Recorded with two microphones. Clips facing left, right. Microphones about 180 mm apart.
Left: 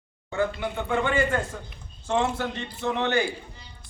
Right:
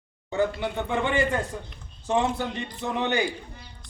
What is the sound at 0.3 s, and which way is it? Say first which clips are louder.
A man's voice: right 1 dB; 20° right (ahead or behind).